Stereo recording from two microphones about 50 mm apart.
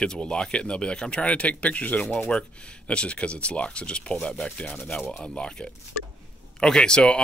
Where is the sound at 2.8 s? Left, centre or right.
Left.